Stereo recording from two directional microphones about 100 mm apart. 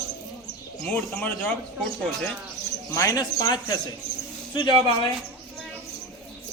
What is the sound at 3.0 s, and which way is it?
Speech, 35° left (ahead or behind).